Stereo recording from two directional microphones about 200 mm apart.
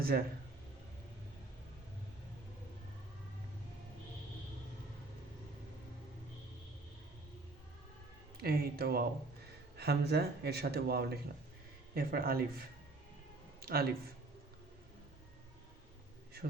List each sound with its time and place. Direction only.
0.1 s speech: 50° right (ahead or behind)
8.4 s speech: 50° right (ahead or behind)